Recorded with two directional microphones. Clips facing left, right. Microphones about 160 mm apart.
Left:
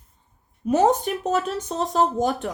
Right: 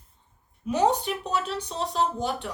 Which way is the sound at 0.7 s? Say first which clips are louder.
Left 4 dB; 45° left (ahead or behind).